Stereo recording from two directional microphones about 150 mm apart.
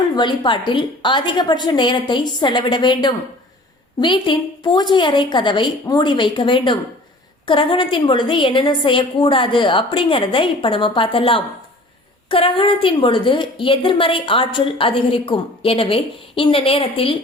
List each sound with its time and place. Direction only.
0.2 s a woman's voice: 30° left (ahead or behind)